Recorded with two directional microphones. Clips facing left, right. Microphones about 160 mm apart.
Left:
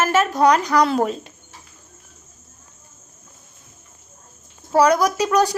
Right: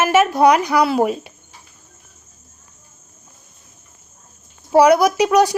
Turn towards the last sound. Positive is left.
turn(degrees=-10)  # may be behind; listen again after turning